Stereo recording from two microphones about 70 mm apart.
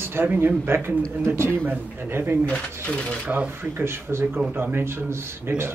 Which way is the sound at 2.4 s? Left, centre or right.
Centre.